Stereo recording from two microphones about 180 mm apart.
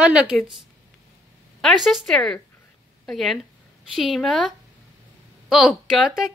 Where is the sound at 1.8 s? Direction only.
Centre (ahead or behind).